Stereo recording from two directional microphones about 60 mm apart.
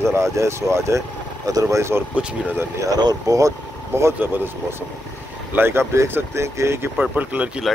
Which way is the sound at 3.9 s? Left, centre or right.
Right.